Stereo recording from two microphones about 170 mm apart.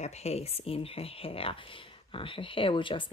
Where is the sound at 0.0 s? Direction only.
40° left (ahead or behind).